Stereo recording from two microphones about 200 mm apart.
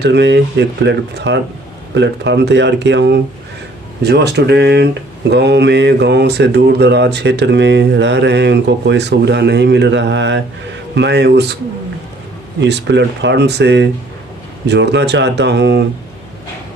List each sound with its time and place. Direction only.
0.0 s speech: 60° right (ahead or behind)
12.5 s speech: 60° right (ahead or behind)